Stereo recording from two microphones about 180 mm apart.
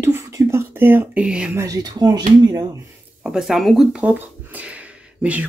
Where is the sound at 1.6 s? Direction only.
20° right (ahead or behind).